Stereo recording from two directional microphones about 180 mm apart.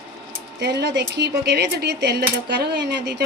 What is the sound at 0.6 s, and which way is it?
Speech, 65° right (ahead or behind).